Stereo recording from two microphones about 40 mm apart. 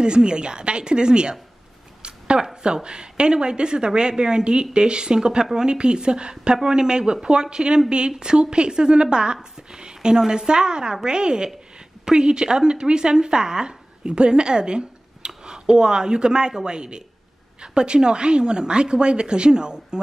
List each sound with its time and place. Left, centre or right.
0.0 s speech: right
2.0 s a sound: right
2.6 s speech: right